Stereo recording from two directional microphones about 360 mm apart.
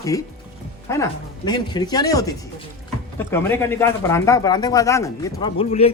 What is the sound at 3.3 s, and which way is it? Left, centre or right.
Speech, centre.